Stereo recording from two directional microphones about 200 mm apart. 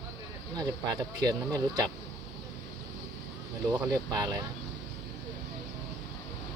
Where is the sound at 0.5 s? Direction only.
20° right (ahead or behind).